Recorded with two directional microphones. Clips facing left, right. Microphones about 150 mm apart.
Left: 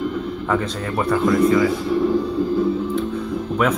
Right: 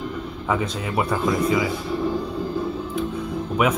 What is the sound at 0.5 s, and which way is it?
Speech, 10° right (ahead or behind).